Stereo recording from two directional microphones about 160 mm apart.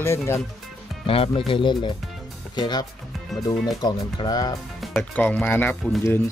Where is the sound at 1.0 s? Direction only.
35° left (ahead or behind).